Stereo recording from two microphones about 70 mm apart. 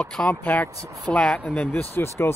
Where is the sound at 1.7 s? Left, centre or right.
Left.